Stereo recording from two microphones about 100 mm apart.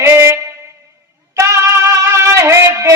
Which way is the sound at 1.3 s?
30° right (ahead or behind).